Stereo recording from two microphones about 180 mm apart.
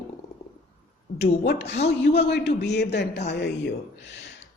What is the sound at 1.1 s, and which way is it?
A woman's voice, 65° left (ahead or behind).